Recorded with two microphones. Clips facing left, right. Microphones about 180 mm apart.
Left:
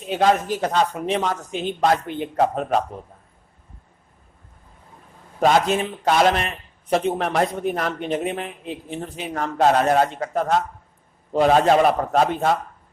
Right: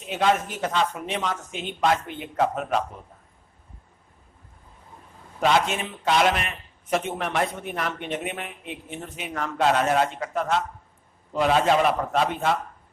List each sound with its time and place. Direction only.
0.1 s a man's voice: 35° left (ahead or behind)
5.4 s a man's voice: 40° left (ahead or behind)